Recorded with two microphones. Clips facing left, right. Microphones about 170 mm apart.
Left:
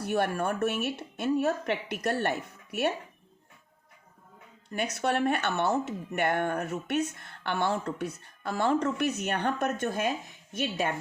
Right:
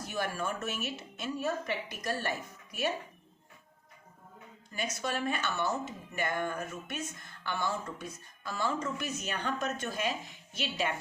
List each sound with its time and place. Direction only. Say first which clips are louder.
0.0 s speech: left 7 dB; 60° left (ahead or behind)
4.7 s speech: left 6 dB; 60° left (ahead or behind)